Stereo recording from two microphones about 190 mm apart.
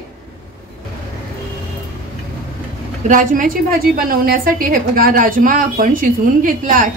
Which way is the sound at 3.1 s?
45° right (ahead or behind).